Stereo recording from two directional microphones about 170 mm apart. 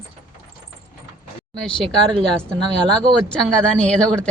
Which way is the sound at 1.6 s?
5° left (ahead or behind).